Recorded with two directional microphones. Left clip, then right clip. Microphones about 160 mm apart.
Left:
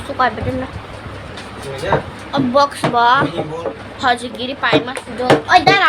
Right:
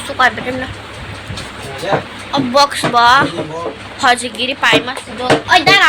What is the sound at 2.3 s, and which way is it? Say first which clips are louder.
A woman's voice: right 2 dB; 10° left (ahead or behind).